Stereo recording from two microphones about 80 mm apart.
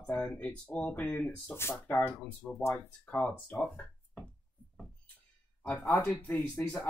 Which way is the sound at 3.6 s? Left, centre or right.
Left.